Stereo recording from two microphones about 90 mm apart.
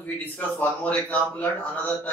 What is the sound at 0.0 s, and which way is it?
Speech, 20° left (ahead or behind).